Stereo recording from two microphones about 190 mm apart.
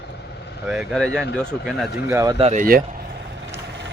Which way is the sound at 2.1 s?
15° right (ahead or behind).